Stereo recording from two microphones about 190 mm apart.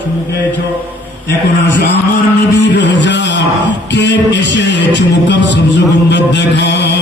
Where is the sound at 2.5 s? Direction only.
65° left (ahead or behind).